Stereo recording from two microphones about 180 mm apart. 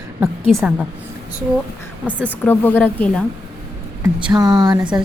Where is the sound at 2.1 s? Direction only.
10° left (ahead or behind).